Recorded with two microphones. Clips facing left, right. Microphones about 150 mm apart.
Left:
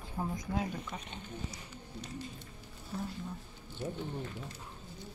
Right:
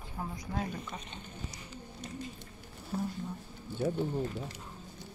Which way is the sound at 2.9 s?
45° right (ahead or behind).